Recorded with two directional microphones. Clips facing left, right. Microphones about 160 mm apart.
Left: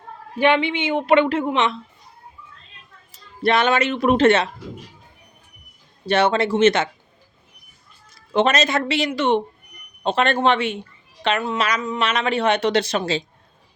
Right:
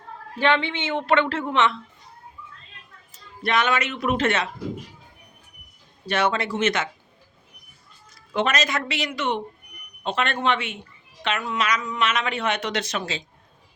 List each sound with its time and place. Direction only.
0.3 s a woman's voice: 15° left (ahead or behind)
3.4 s speech: 30° left (ahead or behind)
6.1 s speech: 30° left (ahead or behind)
8.3 s speech: 25° left (ahead or behind)